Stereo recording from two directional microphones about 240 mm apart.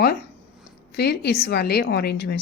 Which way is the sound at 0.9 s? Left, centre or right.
Left.